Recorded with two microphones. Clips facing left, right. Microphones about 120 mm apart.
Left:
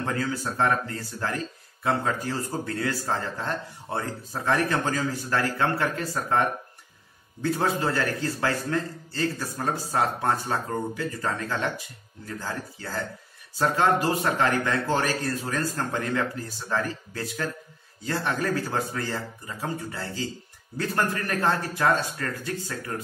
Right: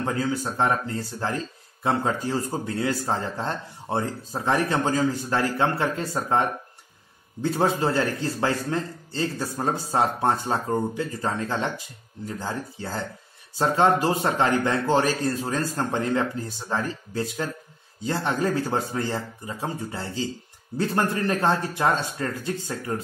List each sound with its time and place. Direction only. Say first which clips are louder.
0.0 s speech: right 2 dB; 20° right (ahead or behind)